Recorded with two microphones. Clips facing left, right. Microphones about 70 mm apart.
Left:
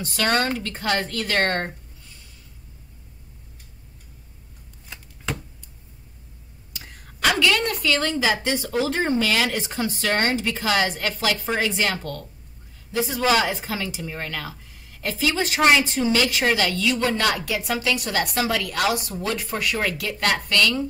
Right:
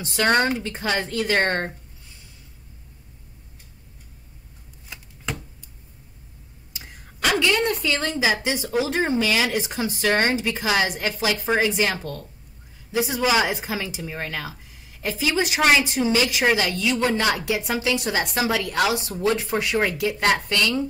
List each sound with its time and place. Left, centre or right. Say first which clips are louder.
0.2 s speech: right 2 dB; right
4.8 s shuffling cards: left 1 dB; centre
7.3 s a woman's voice: right 1 dB; right